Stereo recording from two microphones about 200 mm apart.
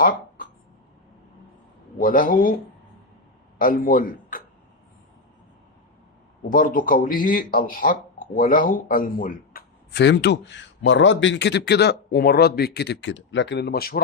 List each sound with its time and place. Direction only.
0.0 s speech: 45° left (ahead or behind)
2.0 s speech: 45° left (ahead or behind)
3.6 s speech: 45° left (ahead or behind)
6.5 s speech: 45° left (ahead or behind)